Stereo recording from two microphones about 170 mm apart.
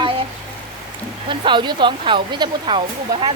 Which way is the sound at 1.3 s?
30° right (ahead or behind).